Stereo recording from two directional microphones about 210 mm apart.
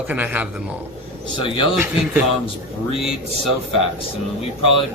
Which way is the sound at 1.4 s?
25° left (ahead or behind).